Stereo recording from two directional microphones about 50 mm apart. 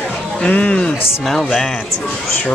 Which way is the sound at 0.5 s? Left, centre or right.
Left.